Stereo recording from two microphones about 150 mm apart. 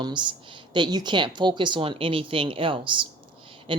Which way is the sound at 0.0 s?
30° right (ahead or behind).